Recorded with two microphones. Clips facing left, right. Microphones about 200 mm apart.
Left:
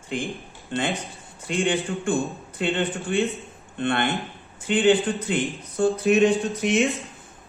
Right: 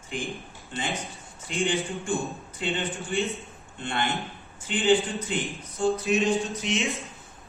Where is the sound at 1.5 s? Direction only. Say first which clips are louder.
Left 4 dB; 65° left (ahead or behind).